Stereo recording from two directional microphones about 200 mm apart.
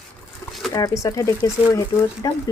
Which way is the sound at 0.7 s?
15° left (ahead or behind).